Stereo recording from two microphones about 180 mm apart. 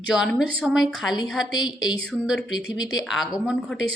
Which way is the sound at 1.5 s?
25° left (ahead or behind).